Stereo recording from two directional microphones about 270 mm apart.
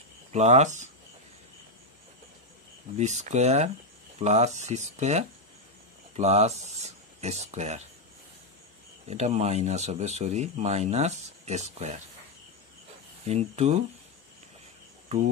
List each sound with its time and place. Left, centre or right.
0.3 s speech: right
3.0 s speech: right
9.0 s speech: right
13.3 s speech: right